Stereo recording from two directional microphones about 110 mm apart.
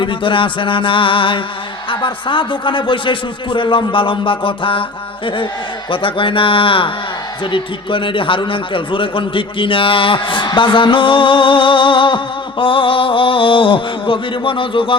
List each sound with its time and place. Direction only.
0.0 s a man's voice: 50° left (ahead or behind)